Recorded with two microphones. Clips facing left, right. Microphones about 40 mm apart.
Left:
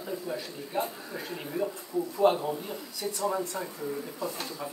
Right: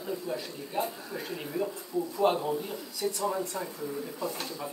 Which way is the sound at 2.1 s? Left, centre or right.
Centre.